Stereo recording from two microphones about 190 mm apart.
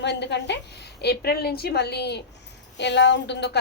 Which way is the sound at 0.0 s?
65° left (ahead or behind).